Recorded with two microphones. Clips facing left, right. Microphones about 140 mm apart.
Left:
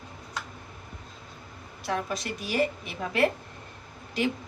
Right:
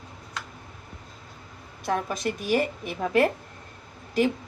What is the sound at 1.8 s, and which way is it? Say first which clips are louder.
A woman's voice: right 4 dB; 50° right (ahead or behind).